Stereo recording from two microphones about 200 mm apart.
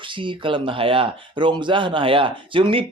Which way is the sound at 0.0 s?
25° right (ahead or behind).